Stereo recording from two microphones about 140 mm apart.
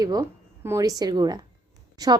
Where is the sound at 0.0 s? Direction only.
25° right (ahead or behind).